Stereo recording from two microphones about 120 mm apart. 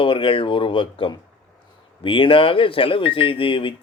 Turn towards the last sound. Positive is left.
turn(degrees=45)  # may be behind; listen again after turning